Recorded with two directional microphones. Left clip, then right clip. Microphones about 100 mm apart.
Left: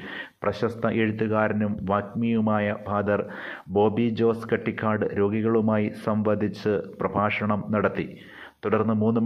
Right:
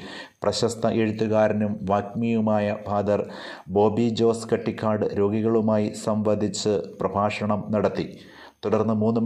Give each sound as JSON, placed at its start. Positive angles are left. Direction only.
{"t": 0.4, "sound": "speech", "side_deg": -25}
{"t": 8.9, "sound": "speech", "side_deg": -5}